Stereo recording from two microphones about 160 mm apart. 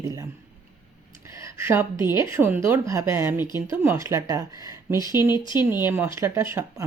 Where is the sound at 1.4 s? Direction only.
15° right (ahead or behind).